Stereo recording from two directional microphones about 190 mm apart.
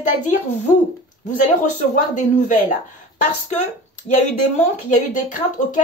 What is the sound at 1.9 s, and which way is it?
Speech, 40° left (ahead or behind).